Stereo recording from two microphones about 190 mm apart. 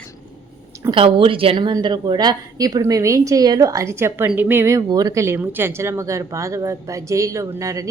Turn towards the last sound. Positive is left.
turn(degrees=-15)  # may be behind; listen again after turning